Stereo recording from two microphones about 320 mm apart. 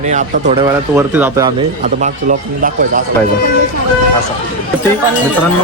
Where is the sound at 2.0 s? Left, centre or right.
Right.